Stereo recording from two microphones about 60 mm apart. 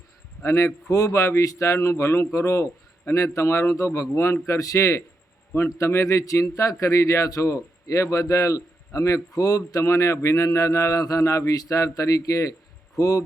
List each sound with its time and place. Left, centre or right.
0.4 s a man's voice: left
4.4 s a man's voice: left
7.3 s a man's voice: left